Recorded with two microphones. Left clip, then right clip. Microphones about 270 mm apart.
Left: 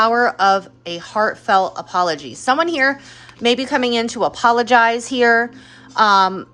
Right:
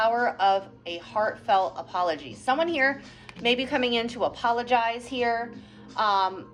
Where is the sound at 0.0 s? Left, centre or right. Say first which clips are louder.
Left 8 dB; left.